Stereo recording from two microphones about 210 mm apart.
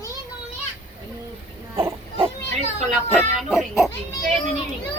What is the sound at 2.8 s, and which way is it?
Speech, 35° right (ahead or behind).